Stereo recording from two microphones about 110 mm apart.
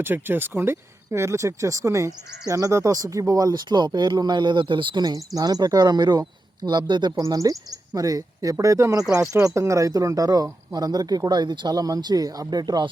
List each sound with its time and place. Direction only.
0.0 s speech: 20° right (ahead or behind); by 12.9 s 35° right (ahead or behind)